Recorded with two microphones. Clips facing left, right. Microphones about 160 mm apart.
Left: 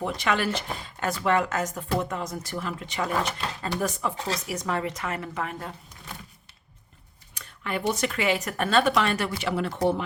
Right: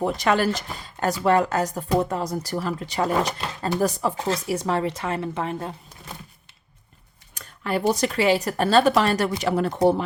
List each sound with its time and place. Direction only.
0.0 s speech: 40° right (ahead or behind)
7.3 s speech: 40° right (ahead or behind)